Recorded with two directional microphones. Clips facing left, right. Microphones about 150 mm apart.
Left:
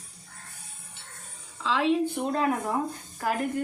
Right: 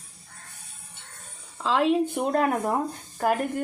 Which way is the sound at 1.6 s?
50° right (ahead or behind).